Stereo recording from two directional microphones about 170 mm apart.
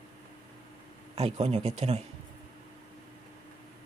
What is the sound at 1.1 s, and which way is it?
Speech, 40° right (ahead or behind).